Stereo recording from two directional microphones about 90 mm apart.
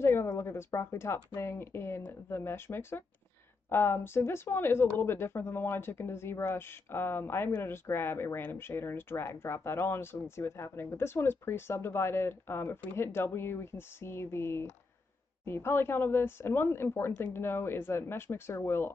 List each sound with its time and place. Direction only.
0.0 s speech: 30° left (ahead or behind)